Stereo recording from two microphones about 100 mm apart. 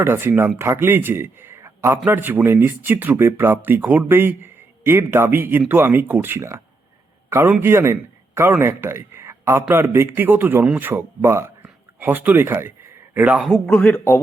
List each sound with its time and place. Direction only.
0.0 s a man's voice: 25° right (ahead or behind)
11.6 s a sound: 20° right (ahead or behind)
13.7 s speech: 15° left (ahead or behind)